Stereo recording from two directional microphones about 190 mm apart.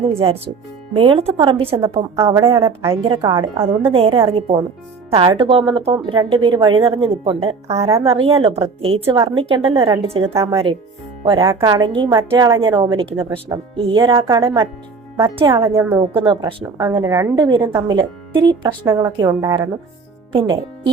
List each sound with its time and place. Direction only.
0.0 s a woman's voice: 30° right (ahead or behind)
7.9 s speech: 15° right (ahead or behind)
8.2 s a woman's voice: 30° right (ahead or behind)
10.3 s a woman's voice: 15° right (ahead or behind)